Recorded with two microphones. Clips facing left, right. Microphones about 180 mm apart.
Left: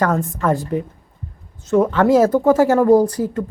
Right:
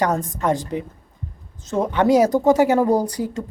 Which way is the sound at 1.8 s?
15° right (ahead or behind).